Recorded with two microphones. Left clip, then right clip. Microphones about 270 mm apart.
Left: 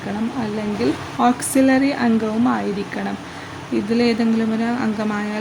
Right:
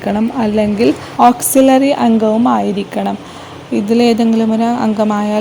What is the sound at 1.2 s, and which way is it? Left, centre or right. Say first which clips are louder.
Speech: right 9 dB; centre.